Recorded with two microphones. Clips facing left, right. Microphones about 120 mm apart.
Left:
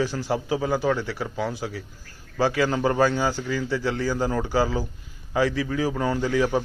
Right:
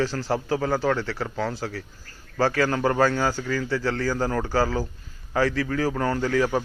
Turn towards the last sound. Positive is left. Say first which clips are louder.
# even
turn(degrees=15)  # may be behind; listen again after turning